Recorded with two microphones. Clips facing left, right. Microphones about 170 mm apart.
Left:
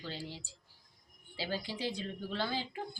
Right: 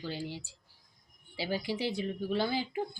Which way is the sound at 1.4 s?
10° right (ahead or behind).